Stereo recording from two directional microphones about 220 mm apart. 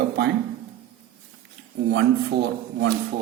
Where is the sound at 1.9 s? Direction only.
55° right (ahead or behind).